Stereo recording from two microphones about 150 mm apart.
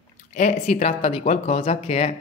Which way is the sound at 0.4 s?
45° left (ahead or behind).